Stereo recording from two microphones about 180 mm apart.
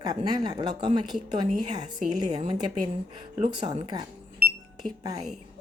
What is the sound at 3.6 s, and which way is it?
Speech, 25° right (ahead or behind).